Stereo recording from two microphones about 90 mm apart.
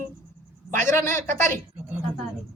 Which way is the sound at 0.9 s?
25° left (ahead or behind).